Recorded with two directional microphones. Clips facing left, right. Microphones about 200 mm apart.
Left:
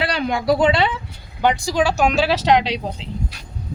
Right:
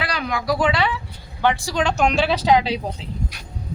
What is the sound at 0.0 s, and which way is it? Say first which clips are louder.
Speech: left 4 dB; 30° left (ahead or behind).